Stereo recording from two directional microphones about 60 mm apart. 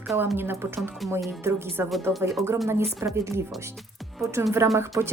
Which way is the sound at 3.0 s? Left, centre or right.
Right.